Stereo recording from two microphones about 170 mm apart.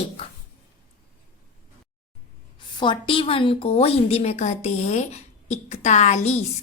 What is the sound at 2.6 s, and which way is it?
A woman's voice, 30° left (ahead or behind).